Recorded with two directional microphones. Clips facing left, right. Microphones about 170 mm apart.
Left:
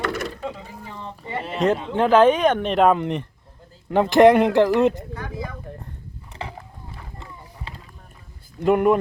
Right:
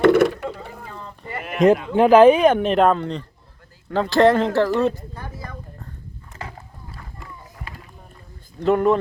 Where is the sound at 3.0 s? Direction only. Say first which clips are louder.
Left 2 dB; 20° left (ahead or behind).